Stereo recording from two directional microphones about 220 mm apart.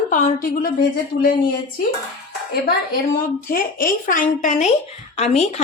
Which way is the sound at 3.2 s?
40° left (ahead or behind).